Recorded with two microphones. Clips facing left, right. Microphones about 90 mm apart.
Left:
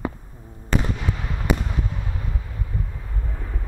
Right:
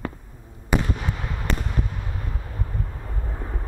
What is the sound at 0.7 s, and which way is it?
Fireworks, 10° right (ahead or behind).